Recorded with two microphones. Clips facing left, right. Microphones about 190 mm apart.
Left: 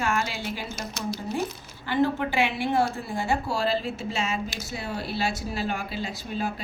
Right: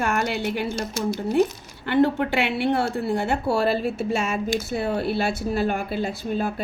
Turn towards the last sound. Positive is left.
turn(degrees=-50)  # may be behind; listen again after turning